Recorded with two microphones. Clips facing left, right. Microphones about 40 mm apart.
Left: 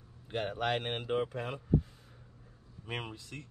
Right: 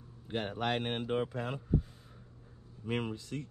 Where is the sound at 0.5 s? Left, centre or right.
Left.